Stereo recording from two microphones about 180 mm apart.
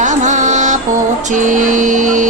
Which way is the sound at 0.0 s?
40° right (ahead or behind).